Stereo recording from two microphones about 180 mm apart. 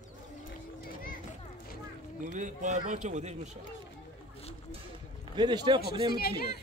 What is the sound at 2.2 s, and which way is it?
A man's voice, 45° right (ahead or behind).